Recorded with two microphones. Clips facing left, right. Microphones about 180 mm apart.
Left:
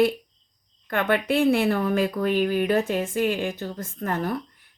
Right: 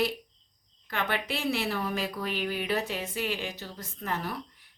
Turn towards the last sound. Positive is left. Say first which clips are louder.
# left 7 dB
turn(degrees=50)  # may be behind; listen again after turning